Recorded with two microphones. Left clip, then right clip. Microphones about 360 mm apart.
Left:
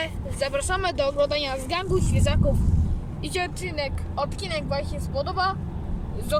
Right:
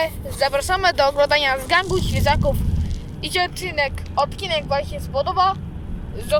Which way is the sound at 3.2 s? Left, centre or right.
Centre.